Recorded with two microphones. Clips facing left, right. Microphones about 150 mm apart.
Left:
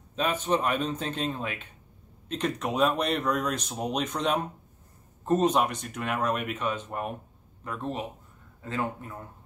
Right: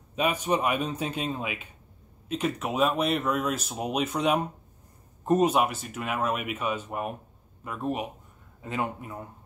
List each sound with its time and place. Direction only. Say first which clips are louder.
0.1 s speech: right 1 dB; 10° right (ahead or behind)